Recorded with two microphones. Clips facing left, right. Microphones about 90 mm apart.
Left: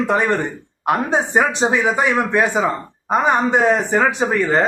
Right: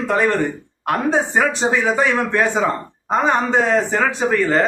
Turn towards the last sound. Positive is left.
turn(degrees=20)  # may be behind; listen again after turning